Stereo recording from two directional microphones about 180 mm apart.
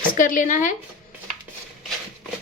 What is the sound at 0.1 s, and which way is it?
Speech, 45° left (ahead or behind).